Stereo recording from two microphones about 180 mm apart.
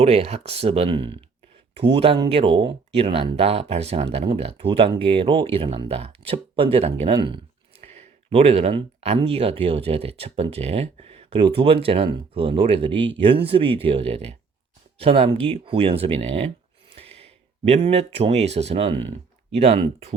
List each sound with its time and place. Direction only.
0.0 s speech: 35° right (ahead or behind)